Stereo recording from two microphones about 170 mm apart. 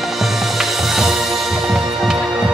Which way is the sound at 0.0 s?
Centre (ahead or behind).